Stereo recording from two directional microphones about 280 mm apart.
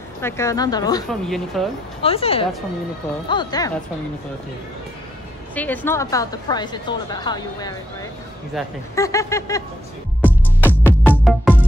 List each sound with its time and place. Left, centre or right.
0.2 s a woman's voice: centre
1.0 s speech: centre
2.0 s a woman's voice: centre
5.5 s a woman's voice: centre
8.6 s speech: centre
8.9 s a woman's voice: centre
10.6 s music: centre